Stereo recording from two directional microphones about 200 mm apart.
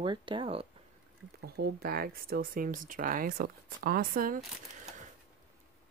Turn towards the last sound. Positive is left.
turn(degrees=-40)  # may be behind; listen again after turning